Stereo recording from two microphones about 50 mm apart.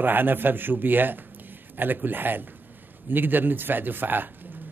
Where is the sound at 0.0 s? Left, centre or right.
Right.